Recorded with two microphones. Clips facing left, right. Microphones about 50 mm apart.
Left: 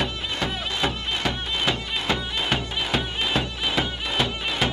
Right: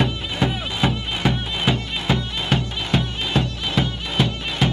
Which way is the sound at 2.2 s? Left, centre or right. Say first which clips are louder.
Right 2 dB; centre.